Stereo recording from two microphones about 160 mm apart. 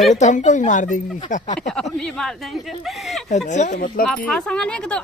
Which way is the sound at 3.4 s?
50° left (ahead or behind).